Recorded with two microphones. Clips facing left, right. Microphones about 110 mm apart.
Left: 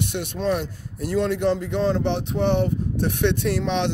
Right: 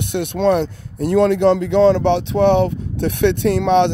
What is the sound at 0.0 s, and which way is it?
Speech, 55° right (ahead or behind).